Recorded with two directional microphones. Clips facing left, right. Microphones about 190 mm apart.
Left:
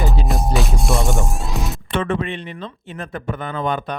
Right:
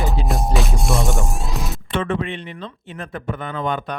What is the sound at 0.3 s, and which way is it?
Music, centre (ahead or behind).